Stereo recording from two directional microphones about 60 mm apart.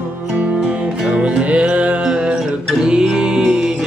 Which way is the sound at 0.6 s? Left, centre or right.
Centre.